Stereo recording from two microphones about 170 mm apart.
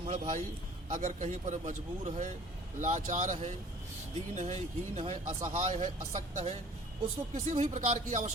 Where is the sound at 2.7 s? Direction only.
45° right (ahead or behind).